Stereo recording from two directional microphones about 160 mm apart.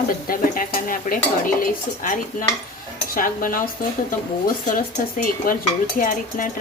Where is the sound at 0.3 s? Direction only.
60° left (ahead or behind).